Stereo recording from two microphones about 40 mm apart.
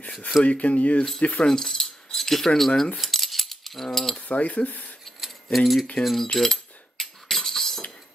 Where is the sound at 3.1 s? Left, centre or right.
Centre.